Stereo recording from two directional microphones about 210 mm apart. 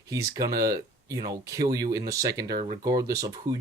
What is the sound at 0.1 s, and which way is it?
Speech, 15° right (ahead or behind).